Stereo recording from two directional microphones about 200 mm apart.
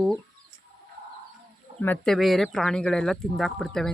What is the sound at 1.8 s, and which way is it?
Speech, 5° left (ahead or behind).